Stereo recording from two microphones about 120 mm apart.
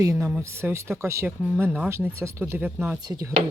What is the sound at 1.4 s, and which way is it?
Speech, 10° right (ahead or behind).